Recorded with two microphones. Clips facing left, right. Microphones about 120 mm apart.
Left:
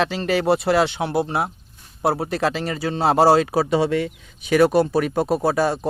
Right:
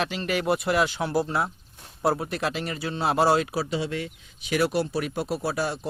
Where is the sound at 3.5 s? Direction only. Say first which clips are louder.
Left 9 dB; 65° left (ahead or behind).